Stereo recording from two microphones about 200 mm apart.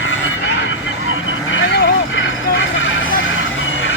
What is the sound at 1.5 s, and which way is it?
Vehicle, 70° left (ahead or behind).